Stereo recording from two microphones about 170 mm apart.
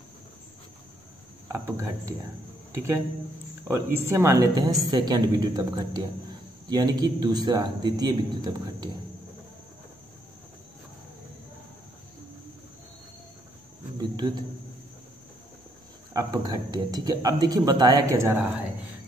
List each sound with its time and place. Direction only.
1.5 s speech: 15° right (ahead or behind)
3.6 s speech: 15° right (ahead or behind)
13.9 s a sound: 25° right (ahead or behind)
16.1 s speech: 20° right (ahead or behind)